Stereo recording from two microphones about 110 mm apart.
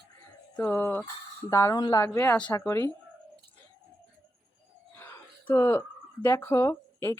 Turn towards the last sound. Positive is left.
turn(degrees=20)  # may be behind; listen again after turning